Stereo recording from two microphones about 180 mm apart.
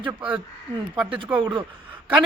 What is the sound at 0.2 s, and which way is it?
A man's voice, 10° right (ahead or behind).